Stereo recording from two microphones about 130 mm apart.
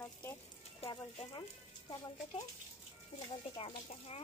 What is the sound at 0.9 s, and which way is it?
Speech, 35° left (ahead or behind).